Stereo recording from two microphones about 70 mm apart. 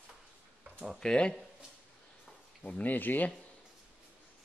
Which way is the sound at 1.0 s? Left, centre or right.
Centre.